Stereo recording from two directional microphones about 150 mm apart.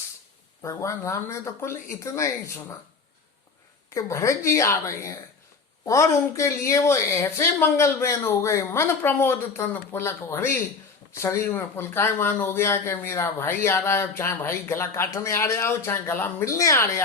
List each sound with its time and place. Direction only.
0.6 s speech: 20° left (ahead or behind)
3.9 s a woman's voice: 20° left (ahead or behind)